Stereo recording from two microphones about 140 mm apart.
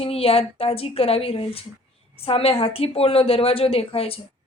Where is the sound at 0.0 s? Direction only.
45° left (ahead or behind).